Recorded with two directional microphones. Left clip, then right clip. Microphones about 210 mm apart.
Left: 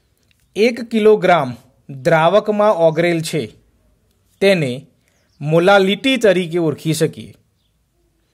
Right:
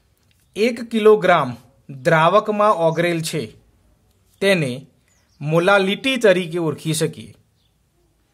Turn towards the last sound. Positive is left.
turn(degrees=15)  # may be behind; listen again after turning